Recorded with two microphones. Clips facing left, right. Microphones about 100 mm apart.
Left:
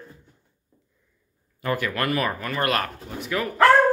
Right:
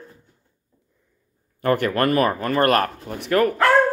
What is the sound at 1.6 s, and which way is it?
Speech, 50° right (ahead or behind).